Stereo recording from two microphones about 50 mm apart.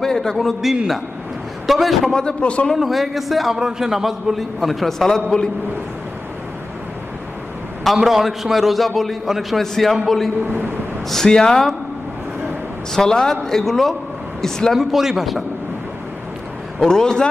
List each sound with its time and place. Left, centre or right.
0.0 s a sound: centre
0.4 s a man's voice: centre
2.1 s a man's voice: centre
2.7 s a man's voice: centre
7.8 s a man's voice: centre
12.9 s a man's voice: centre
14.8 s speech: centre
16.8 s a man's voice: centre